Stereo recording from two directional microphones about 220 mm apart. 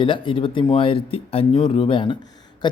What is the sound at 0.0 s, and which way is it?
Speech, 20° left (ahead or behind).